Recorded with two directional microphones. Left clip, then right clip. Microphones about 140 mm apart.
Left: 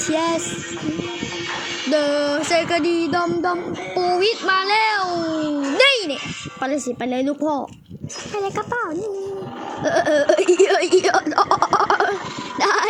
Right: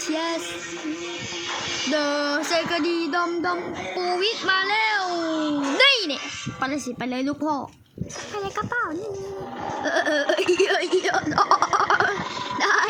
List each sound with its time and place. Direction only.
0.1 s child singing: 25° left (ahead or behind)
2.0 s a woman's voice: 15° left (ahead or behind)
2.5 s child singing: 20° left (ahead or behind)
6.6 s a woman's voice: 10° left (ahead or behind)
8.4 s child singing: 20° left (ahead or behind)
10.8 s a woman's voice: 35° left (ahead or behind)
11.3 s a sound: 15° left (ahead or behind)
12.5 s dog: 25° left (ahead or behind)